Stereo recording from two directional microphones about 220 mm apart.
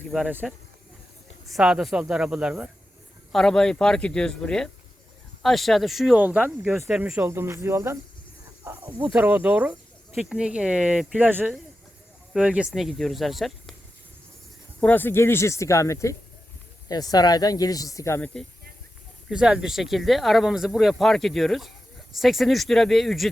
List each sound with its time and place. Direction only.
0.1 s speech: 5° right (ahead or behind)
8.6 s cricket: 10° right (ahead or behind)
10.2 s speech: 5° right (ahead or behind)
14.8 s speech: 10° left (ahead or behind)
19.3 s speech: 5° right (ahead or behind)